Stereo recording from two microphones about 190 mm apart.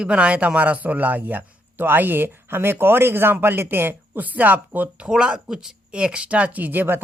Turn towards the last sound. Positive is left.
turn(degrees=-10)  # may be behind; listen again after turning